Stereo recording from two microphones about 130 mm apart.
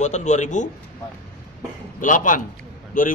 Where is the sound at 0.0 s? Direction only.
65° left (ahead or behind).